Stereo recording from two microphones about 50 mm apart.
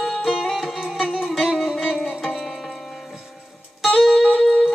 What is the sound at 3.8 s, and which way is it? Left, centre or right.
Music, centre.